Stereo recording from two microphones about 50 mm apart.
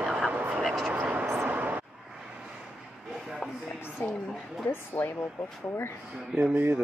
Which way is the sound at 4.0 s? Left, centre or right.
Left.